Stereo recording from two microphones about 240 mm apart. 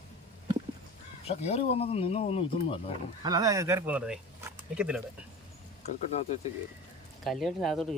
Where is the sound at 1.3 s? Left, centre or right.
Left.